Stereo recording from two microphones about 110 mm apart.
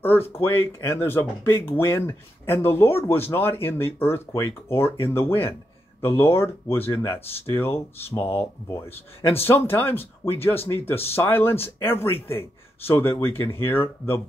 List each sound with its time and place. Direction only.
0.0 s speech: 20° left (ahead or behind)